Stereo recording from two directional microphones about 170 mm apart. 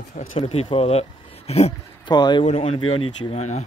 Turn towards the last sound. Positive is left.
turn(degrees=40)  # may be behind; listen again after turning